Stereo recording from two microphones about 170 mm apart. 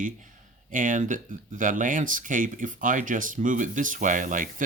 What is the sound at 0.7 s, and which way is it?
Speech, 50° right (ahead or behind).